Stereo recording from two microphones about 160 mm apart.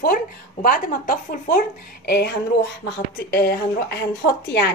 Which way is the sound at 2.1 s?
90° left.